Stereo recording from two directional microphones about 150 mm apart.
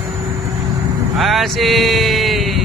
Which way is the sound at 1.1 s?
Centre (ahead or behind).